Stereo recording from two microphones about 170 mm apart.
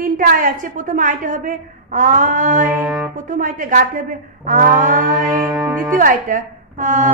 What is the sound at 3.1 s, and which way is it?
A woman's voice, 50° right (ahead or behind).